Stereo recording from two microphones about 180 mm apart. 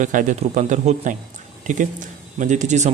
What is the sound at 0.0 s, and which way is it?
A man's voice, 45° right (ahead or behind).